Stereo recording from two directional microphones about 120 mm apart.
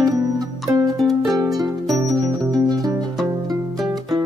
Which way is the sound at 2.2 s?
35° right (ahead or behind).